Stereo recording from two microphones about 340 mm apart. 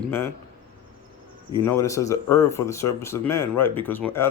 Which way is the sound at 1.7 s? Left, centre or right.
Centre.